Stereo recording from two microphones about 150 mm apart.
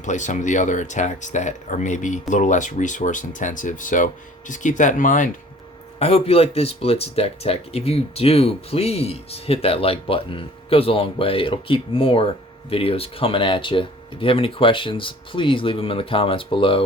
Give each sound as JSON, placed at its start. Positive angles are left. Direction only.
{"t": 0.0, "sound": "speech", "side_deg": 55}
{"t": 6.0, "sound": "speech", "side_deg": 40}